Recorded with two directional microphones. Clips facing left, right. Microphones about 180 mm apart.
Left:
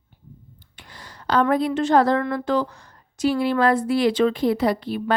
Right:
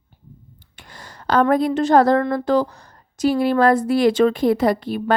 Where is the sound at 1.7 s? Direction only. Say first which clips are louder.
Right 3 dB; 40° right (ahead or behind).